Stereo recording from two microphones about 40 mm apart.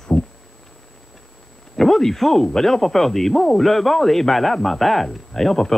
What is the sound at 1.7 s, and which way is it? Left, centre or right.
Speech, centre.